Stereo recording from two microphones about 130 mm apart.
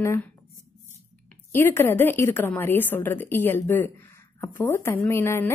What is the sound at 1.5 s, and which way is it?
A woman's voice, 15° left (ahead or behind).